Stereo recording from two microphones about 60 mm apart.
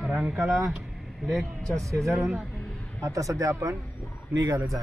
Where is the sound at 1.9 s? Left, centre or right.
Right.